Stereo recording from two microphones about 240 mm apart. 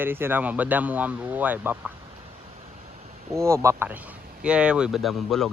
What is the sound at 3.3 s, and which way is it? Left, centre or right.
Speech, centre.